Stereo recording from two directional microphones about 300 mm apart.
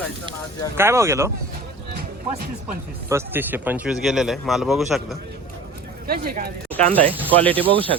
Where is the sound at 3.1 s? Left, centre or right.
Centre.